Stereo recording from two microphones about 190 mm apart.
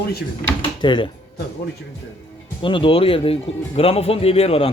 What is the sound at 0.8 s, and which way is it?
Speech, 25° left (ahead or behind).